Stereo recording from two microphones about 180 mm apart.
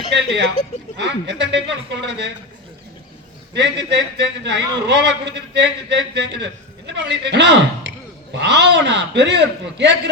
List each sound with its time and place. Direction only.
0.1 s a man's voice: 75° right (ahead or behind)
3.5 s a man's voice: 70° right (ahead or behind)